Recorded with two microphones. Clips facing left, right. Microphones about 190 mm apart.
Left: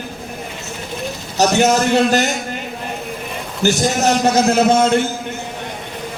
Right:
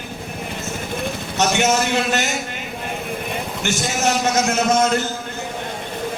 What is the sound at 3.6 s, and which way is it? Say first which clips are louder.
A man's voice: left 7 dB; 35° left (ahead or behind).